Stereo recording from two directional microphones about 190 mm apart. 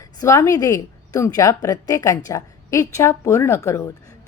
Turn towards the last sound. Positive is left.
turn(degrees=15)  # may be behind; listen again after turning